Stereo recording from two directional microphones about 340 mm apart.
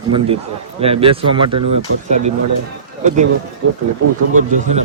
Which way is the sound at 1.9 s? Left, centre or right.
Right.